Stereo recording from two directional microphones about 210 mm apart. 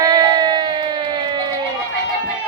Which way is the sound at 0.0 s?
20° right (ahead or behind).